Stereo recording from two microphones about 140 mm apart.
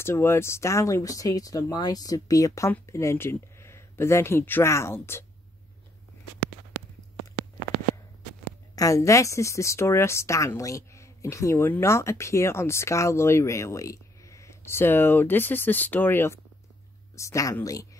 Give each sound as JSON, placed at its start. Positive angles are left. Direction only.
{"t": 0.0, "sound": "speech", "side_deg": 20}
{"t": 8.7, "sound": "speech", "side_deg": 25}